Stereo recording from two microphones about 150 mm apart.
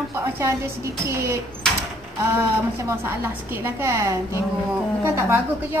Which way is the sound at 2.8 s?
15° right (ahead or behind).